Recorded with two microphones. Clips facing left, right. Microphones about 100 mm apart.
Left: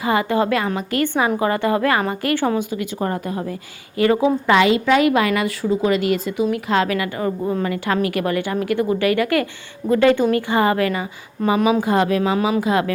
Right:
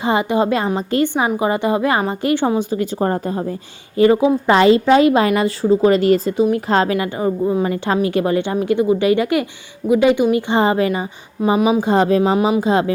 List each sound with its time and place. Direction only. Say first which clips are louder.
0.0 s a woman's voice: right 2 dB; 20° right (ahead or behind)
2.6 s a woman's voice: right 4 dB; 35° right (ahead or behind)